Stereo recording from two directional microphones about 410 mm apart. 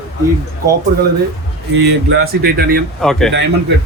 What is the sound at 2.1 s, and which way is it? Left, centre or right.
Speech, right.